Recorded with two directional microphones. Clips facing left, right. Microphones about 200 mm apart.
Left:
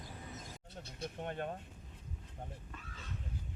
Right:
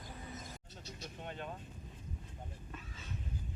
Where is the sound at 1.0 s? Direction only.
55° left (ahead or behind).